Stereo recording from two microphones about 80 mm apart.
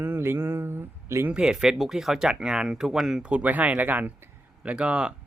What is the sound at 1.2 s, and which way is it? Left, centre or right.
Speech, centre.